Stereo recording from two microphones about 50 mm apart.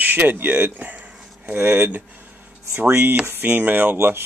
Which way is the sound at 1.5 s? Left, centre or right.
Right.